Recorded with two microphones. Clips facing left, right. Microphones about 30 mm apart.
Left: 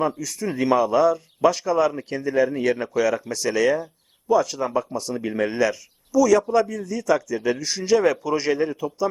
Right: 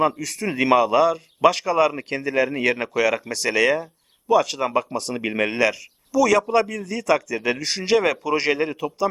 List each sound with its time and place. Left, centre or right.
0.2 s a man's voice: right